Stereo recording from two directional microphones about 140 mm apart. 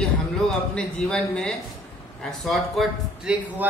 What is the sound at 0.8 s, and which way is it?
Speech, 5° left (ahead or behind).